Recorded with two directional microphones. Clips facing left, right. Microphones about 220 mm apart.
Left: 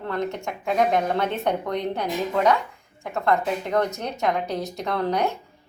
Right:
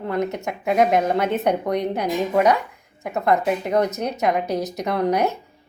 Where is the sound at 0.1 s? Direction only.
20° right (ahead or behind).